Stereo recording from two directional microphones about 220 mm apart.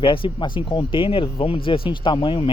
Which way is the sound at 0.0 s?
25° left (ahead or behind).